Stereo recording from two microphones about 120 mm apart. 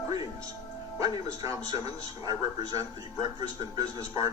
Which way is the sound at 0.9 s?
30° right (ahead or behind).